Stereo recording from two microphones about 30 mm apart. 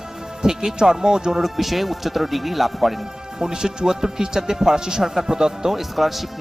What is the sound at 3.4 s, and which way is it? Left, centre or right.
Speech, right.